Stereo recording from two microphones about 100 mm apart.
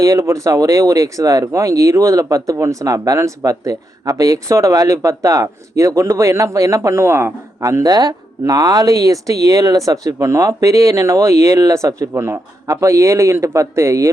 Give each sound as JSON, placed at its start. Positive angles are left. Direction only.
{"t": 0.0, "sound": "speech", "side_deg": -30}